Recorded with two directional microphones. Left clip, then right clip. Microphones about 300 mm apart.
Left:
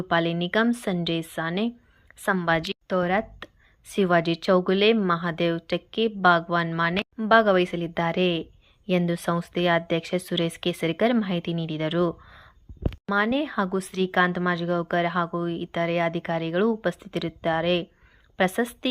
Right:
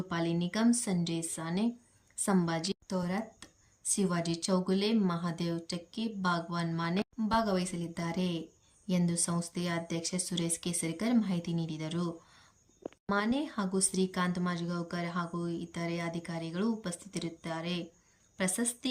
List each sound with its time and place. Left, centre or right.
0.1 s a woman's voice: centre